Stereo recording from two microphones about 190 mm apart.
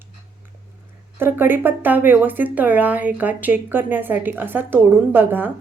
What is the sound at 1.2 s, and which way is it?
Speech, 10° right (ahead or behind).